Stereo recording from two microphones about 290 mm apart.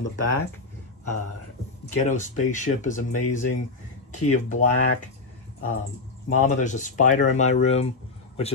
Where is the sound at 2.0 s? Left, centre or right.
Left.